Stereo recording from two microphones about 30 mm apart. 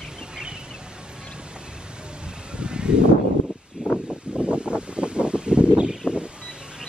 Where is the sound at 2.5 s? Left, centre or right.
Right.